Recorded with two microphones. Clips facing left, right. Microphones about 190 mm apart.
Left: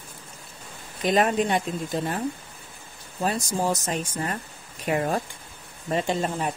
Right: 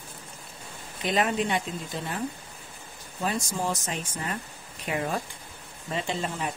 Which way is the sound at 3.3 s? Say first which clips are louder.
Left 4 dB; 40° left (ahead or behind).